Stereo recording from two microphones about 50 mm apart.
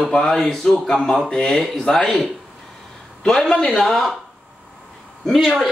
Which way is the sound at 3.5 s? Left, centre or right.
Centre.